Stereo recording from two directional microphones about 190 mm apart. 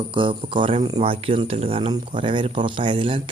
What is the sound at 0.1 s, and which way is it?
Speech, 25° right (ahead or behind).